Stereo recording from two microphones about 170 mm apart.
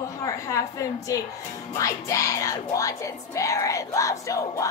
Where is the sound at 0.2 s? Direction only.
20° left (ahead or behind).